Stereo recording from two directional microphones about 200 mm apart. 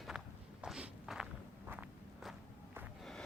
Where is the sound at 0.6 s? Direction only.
5° right (ahead or behind).